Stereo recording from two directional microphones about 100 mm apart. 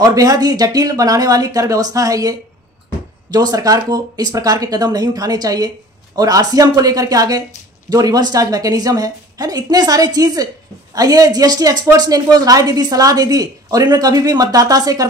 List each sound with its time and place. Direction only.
0.0 s speech: 35° right (ahead or behind)